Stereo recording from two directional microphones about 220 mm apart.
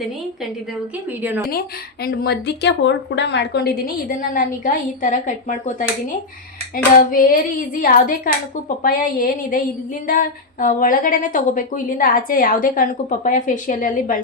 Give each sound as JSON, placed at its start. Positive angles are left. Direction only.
{"t": 1.2, "sound": "speech", "side_deg": -10}
{"t": 1.5, "sound": "speech", "side_deg": 45}
{"t": 6.9, "sound": "a woman's voice", "side_deg": 40}